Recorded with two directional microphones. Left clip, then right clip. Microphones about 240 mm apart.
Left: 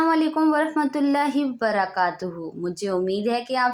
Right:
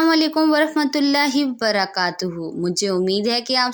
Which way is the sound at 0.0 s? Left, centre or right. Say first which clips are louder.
Right 3 dB; right.